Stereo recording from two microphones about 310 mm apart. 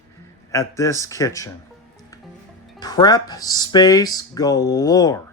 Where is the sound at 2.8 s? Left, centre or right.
Centre.